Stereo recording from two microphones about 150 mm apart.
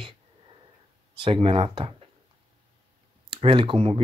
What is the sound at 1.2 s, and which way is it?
Speech, 35° right (ahead or behind).